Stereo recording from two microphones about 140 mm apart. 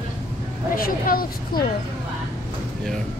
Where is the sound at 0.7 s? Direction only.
90° left.